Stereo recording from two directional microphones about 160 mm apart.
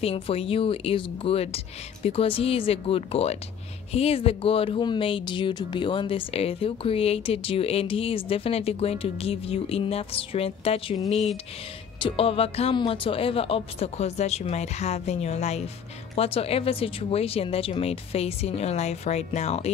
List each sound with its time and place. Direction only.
0.0 s speech: 35° left (ahead or behind)
12.0 s speech: 35° left (ahead or behind)